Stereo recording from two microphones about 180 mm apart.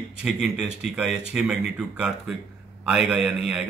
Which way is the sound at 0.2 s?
5° right (ahead or behind).